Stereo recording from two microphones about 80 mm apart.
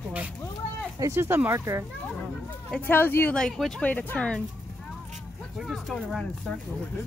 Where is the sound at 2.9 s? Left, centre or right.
Left.